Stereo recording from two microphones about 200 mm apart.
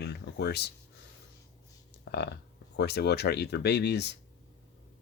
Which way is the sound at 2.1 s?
55° left (ahead or behind).